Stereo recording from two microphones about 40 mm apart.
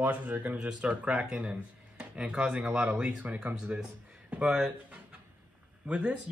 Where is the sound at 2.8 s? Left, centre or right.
Right.